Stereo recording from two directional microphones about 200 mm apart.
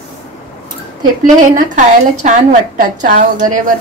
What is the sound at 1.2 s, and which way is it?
A woman's voice, 40° right (ahead or behind).